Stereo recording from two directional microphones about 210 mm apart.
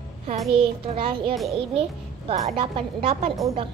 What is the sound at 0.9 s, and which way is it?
A woman's voice, 25° right (ahead or behind).